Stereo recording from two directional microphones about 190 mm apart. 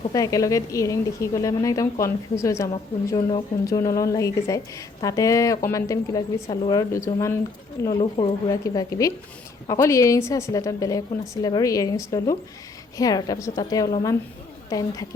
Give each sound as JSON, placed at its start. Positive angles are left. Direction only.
{"t": 0.1, "sound": "a woman's voice", "side_deg": 20}
{"t": 3.2, "sound": "a woman's voice", "side_deg": 25}